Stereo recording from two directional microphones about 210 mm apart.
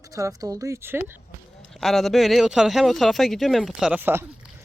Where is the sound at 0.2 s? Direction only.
15° right (ahead or behind).